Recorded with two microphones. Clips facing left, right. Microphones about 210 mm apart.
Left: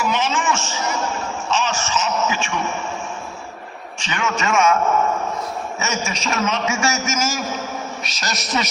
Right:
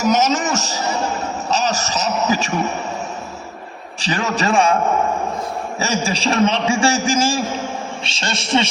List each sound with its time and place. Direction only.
0.0 s a man's voice: 40° right (ahead or behind)
4.0 s a man's voice: 35° right (ahead or behind)
5.8 s a man's voice: 35° right (ahead or behind)